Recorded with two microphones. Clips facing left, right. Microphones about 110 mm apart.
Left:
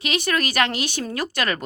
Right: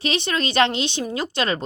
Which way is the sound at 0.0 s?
30° right (ahead or behind).